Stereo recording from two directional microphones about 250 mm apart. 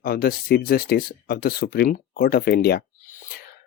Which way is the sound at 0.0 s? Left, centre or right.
Left.